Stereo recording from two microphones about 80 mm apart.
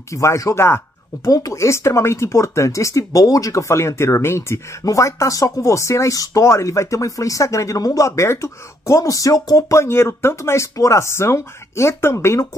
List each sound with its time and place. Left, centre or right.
0.1 s speech: left
1.3 s speech: left